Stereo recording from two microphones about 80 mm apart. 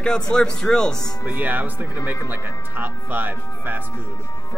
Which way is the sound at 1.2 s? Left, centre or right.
Centre.